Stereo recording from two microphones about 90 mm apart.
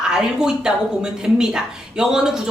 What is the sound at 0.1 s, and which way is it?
A woman's voice, 5° right (ahead or behind).